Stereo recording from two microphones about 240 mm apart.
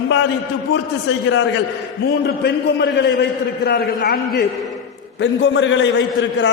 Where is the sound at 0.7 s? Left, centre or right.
Left.